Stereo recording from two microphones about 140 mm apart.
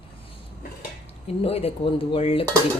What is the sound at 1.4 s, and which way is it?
Speech, 45° left (ahead or behind).